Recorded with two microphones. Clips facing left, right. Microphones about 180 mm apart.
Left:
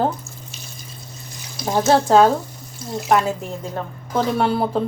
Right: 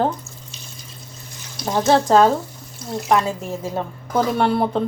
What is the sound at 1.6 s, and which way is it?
A woman's voice, 10° left (ahead or behind).